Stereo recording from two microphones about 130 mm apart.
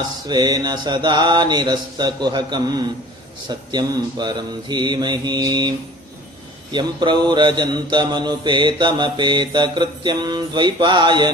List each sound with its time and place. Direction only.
0.3 s mantra: 30° right (ahead or behind)